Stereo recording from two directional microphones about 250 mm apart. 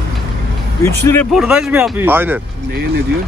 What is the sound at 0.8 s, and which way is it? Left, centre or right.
Speech, centre.